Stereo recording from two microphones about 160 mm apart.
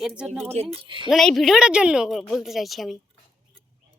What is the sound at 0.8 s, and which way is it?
Speech, 30° right (ahead or behind).